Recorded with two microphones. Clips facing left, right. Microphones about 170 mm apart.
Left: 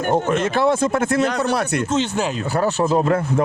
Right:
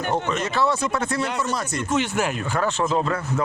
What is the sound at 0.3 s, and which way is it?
Speech, 55° left (ahead or behind).